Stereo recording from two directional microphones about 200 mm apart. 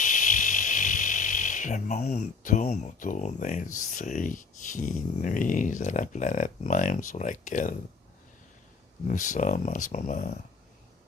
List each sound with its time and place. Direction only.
0.0 s speech: 40° left (ahead or behind)
9.0 s speech: 40° left (ahead or behind)